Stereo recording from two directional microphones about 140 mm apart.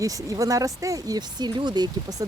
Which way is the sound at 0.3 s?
25° right (ahead or behind).